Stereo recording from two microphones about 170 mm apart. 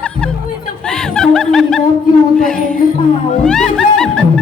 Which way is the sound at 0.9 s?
5° left (ahead or behind).